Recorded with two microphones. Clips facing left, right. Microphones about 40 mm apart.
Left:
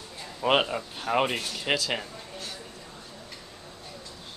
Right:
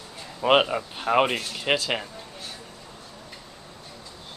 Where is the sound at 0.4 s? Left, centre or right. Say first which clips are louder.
Right 4 dB; centre.